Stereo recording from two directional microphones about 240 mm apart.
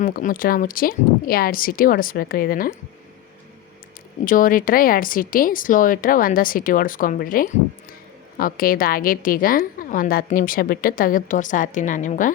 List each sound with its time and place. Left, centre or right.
0.0 s a woman's voice: left
4.3 s a woman's voice: left